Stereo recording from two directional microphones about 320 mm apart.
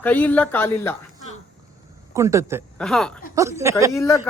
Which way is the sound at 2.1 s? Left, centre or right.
Centre.